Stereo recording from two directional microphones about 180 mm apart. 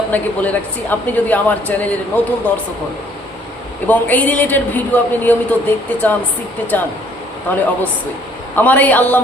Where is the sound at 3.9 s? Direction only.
10° left (ahead or behind).